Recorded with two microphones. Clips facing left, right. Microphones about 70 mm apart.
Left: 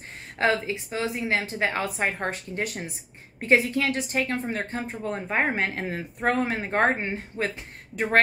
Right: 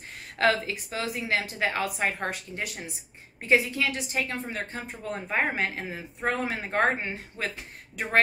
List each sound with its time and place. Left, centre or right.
0.4 s a woman's voice: left
5.8 s speech: left